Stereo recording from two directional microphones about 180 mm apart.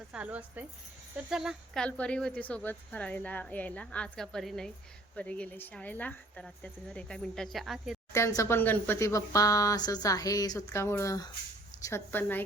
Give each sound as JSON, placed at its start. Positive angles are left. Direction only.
{"t": 0.1, "sound": "speech", "side_deg": -5}
{"t": 8.1, "sound": "speech", "side_deg": 15}